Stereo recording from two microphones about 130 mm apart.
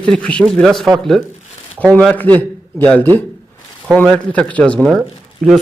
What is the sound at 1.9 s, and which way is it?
Speech, 10° left (ahead or behind).